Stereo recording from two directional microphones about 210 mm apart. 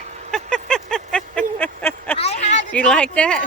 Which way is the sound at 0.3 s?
5° left (ahead or behind).